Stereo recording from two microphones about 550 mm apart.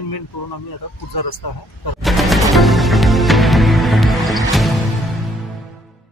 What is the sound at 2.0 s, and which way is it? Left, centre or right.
Music, centre.